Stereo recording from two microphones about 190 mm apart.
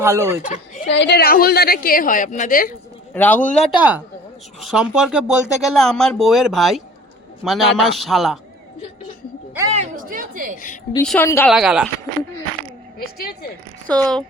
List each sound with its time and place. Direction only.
0.0 s speech: 15° right (ahead or behind)
0.4 s speech: 40° left (ahead or behind)
0.9 s a woman's voice: 65° left (ahead or behind); by 2.7 s 45° left (ahead or behind)
3.2 s a man's voice: 10° left (ahead or behind)
3.8 s speech: 10° right (ahead or behind)
9.7 s a woman's voice: 40° right (ahead or behind)
11.0 s a man's voice: 5° left (ahead or behind)
11.5 s speech: 5° right (ahead or behind)
13.0 s a woman's voice: 55° left (ahead or behind)
13.8 s speech: 5° left (ahead or behind)